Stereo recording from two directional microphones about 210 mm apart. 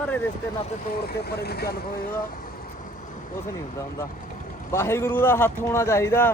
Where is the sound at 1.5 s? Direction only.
50° left (ahead or behind).